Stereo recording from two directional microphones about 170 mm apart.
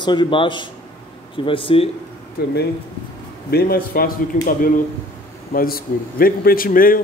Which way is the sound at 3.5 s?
60° left (ahead or behind).